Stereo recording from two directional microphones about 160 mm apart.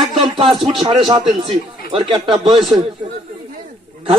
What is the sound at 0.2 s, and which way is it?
A man's voice, 35° right (ahead or behind).